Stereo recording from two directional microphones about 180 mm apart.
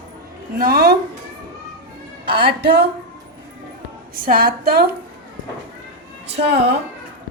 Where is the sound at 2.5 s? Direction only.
60° right (ahead or behind).